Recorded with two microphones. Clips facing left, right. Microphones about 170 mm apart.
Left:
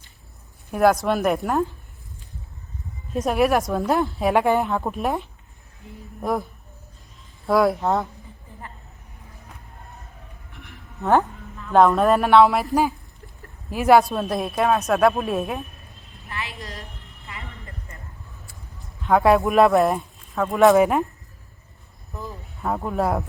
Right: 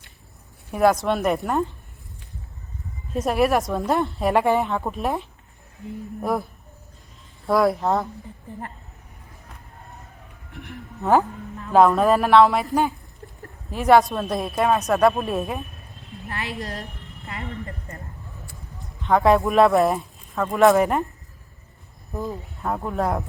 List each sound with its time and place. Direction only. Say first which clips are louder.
0.7 s speech: left 1 dB; centre (ahead or behind)
3.1 s speech: even; centre (ahead or behind)
7.4 s speech: even; centre (ahead or behind)
10.5 s music: right 8 dB; 45° right (ahead or behind)
11.0 s speech: even; centre (ahead or behind)
16.6 s a woman's voice: right 5 dB; 60° right (ahead or behind)
19.0 s speech: left 1 dB; 5° left (ahead or behind)
22.6 s speech: left 1 dB; centre (ahead or behind)